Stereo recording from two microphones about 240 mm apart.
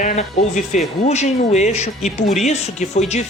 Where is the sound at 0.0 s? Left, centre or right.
Left.